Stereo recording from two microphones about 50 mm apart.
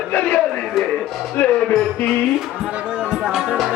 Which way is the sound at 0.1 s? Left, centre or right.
Left.